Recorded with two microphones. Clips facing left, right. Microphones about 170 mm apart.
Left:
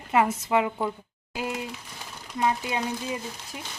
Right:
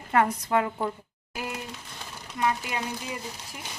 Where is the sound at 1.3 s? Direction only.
20° left (ahead or behind).